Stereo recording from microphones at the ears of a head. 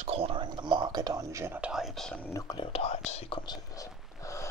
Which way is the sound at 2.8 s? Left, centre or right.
Left.